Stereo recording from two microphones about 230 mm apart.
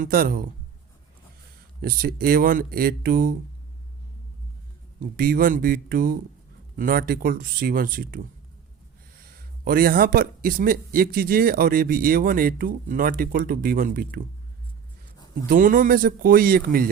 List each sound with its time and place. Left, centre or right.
0.0 s a man's voice: right
1.8 s a man's voice: right
4.9 s a man's voice: right
9.2 s a man's voice: right
15.4 s a man's voice: right